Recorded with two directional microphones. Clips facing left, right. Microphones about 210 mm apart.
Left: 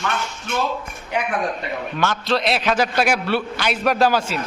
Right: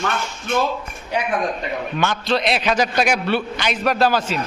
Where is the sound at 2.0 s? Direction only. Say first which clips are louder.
Even; centre (ahead or behind).